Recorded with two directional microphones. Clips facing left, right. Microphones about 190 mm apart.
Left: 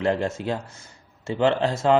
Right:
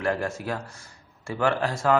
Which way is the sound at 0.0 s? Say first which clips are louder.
Left 3 dB; 25° left (ahead or behind).